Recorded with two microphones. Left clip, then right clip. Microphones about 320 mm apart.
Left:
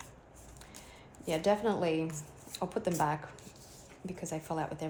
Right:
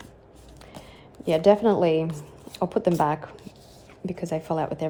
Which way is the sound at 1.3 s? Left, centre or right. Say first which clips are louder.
Right 11 dB; right.